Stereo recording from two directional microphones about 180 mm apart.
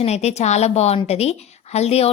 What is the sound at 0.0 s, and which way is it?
A woman's voice, 35° left (ahead or behind).